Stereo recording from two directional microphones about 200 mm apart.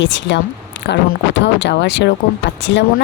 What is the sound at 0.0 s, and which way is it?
A woman's voice, 60° left (ahead or behind).